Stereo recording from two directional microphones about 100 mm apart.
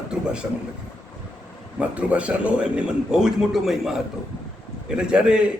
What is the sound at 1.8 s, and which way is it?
Speech, 15° right (ahead or behind).